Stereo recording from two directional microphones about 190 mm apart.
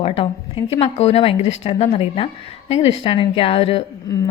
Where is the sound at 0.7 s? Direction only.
30° left (ahead or behind).